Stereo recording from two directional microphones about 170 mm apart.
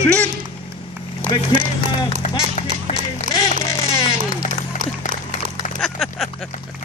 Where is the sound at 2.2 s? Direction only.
45° left (ahead or behind).